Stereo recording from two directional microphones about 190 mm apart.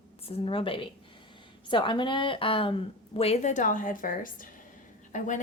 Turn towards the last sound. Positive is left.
turn(degrees=40)  # may be behind; listen again after turning